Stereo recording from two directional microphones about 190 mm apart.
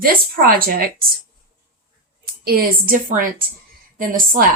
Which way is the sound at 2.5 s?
50° right (ahead or behind).